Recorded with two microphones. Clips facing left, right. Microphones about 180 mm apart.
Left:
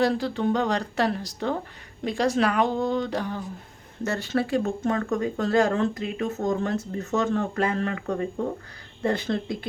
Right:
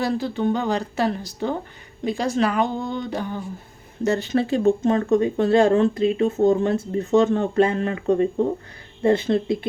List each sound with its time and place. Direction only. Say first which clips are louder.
0.0 s speech: right 1 dB; centre (ahead or behind)
4.0 s speech: right 5 dB; 15° right (ahead or behind)